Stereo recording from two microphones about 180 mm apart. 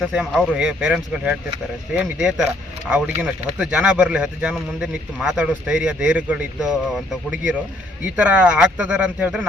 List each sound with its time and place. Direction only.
0.1 s a man's voice: 5° right (ahead or behind)